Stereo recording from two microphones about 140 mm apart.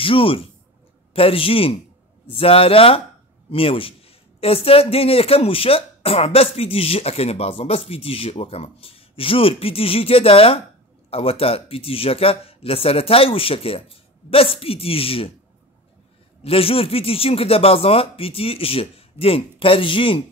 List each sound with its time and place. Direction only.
0.0 s a man's voice: 40° left (ahead or behind)
16.4 s a man's voice: 45° left (ahead or behind)